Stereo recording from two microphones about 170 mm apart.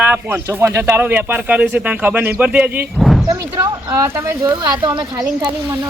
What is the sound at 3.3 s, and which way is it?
Speech, 20° right (ahead or behind).